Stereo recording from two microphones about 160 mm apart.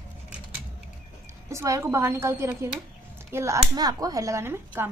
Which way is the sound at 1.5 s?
15° right (ahead or behind).